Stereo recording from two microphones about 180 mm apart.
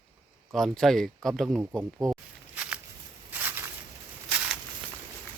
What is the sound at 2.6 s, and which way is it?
Walk, 5° right (ahead or behind).